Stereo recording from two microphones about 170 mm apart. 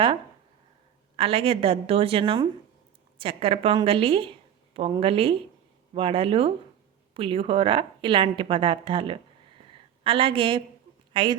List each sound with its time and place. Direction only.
1.1 s a woman's voice: 35° right (ahead or behind)